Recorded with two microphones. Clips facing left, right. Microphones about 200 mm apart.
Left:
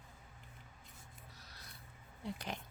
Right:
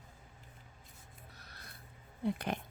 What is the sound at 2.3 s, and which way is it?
Speech, 55° right (ahead or behind).